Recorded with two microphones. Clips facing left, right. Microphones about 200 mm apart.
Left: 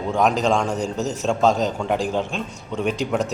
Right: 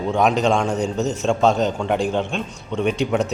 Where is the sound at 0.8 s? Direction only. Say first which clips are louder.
Right 3 dB; 35° left (ahead or behind).